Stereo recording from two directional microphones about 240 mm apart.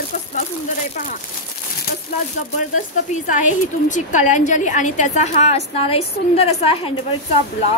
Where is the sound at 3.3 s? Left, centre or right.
Left.